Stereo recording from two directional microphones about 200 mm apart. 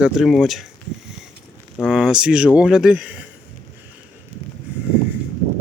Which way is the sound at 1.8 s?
5° right (ahead or behind).